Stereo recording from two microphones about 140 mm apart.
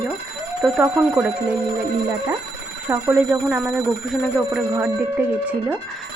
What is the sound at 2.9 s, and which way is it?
Speech, 15° right (ahead or behind).